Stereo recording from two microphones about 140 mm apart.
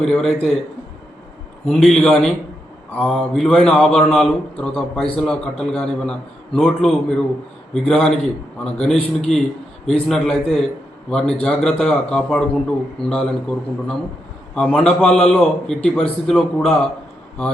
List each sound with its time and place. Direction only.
0.0 s a man's voice: centre (ahead or behind)
1.6 s a man's voice: 5° left (ahead or behind)